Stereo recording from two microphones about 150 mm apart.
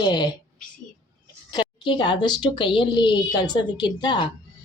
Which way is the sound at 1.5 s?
30° left (ahead or behind).